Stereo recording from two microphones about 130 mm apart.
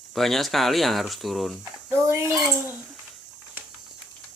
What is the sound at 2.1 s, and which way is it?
Speech, 20° right (ahead or behind).